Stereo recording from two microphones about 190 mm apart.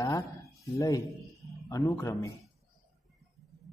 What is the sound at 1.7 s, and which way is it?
Speech, 15° left (ahead or behind).